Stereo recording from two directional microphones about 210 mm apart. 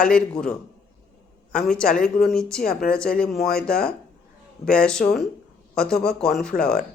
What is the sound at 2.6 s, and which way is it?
Speech, 45° left (ahead or behind).